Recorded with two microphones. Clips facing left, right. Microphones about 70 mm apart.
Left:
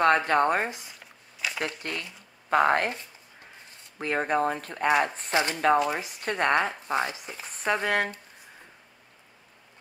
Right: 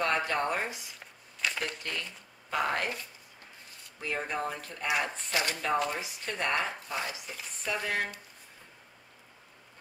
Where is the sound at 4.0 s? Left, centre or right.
Left.